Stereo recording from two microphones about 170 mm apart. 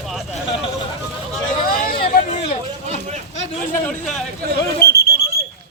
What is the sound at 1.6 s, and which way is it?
Hubbub, 60° left (ahead or behind).